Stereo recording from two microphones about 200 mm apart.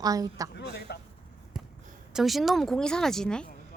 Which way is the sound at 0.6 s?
55° left (ahead or behind).